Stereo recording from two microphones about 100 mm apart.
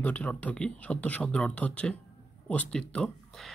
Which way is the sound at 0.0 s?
15° left (ahead or behind).